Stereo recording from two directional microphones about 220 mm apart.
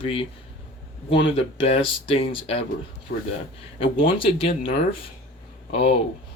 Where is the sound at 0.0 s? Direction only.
25° left (ahead or behind).